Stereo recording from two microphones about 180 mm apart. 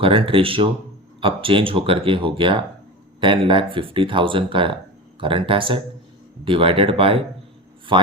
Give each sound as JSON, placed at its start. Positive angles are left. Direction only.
{"t": 0.0, "sound": "speech", "side_deg": -30}